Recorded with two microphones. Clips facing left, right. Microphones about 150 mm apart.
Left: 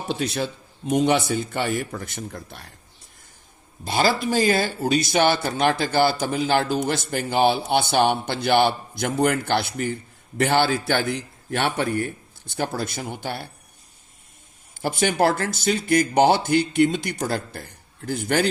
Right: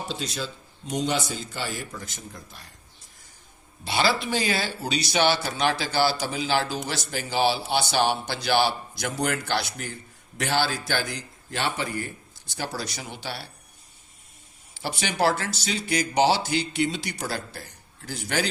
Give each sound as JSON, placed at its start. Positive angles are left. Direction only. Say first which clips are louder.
{"t": 0.1, "sound": "a man's voice", "louder": "left 7 dB", "side_deg": 65}
{"t": 3.8, "sound": "a man's voice", "louder": "left 3 dB", "side_deg": 45}
{"t": 14.8, "sound": "a man's voice", "louder": "left 5 dB", "side_deg": 50}